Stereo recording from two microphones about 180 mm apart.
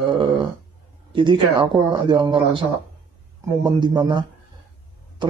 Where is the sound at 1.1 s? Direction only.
25° right (ahead or behind).